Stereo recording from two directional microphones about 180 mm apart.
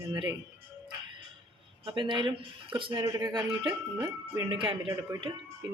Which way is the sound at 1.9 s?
25° right (ahead or behind).